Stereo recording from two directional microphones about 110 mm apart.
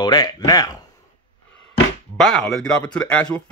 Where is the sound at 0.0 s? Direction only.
40° left (ahead or behind).